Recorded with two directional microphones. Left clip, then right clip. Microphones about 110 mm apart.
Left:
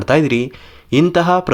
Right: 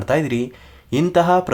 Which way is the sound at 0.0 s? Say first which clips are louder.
Left 5 dB; 25° left (ahead or behind).